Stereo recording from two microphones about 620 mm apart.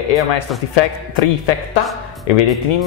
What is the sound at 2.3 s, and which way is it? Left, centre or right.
Speech, left.